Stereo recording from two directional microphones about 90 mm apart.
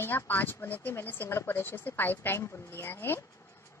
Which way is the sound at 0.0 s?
20° left (ahead or behind).